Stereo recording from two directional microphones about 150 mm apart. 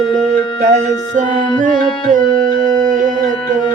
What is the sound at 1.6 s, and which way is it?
Music, 60° right (ahead or behind).